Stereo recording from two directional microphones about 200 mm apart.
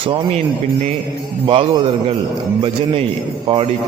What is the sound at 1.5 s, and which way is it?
A man's voice, 25° right (ahead or behind).